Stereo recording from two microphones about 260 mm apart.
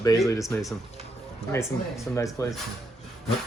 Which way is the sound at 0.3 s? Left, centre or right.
Centre.